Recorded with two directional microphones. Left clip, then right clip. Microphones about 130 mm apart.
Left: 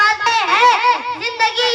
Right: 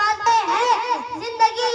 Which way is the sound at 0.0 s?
45° right (ahead or behind).